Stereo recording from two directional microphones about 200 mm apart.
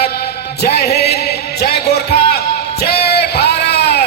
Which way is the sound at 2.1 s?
55° left (ahead or behind).